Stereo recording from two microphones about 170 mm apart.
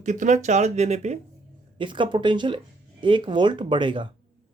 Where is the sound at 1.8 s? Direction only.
30° right (ahead or behind).